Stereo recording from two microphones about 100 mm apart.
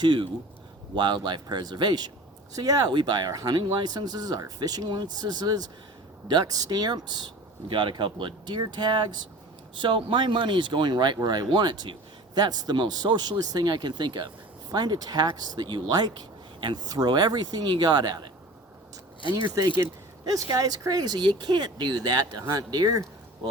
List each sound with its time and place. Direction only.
0.0 s speech: 50° right (ahead or behind)
20.2 s speech: 40° right (ahead or behind)